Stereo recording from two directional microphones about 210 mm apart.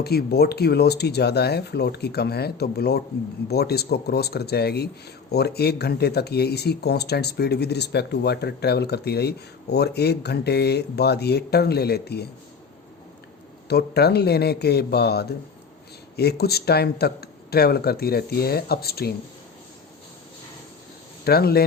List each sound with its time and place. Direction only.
0.0 s speech: 50° left (ahead or behind)
13.7 s speech: 50° left (ahead or behind)
21.2 s speech: 50° left (ahead or behind)